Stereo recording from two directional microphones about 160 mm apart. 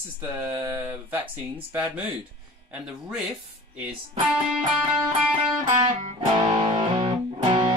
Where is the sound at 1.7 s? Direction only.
10° right (ahead or behind).